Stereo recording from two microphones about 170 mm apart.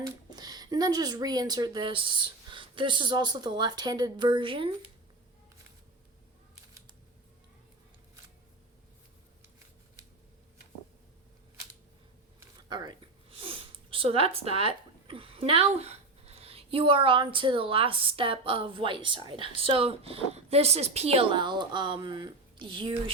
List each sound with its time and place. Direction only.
0.0 s speech: 25° right (ahead or behind)
12.4 s speech: 25° right (ahead or behind)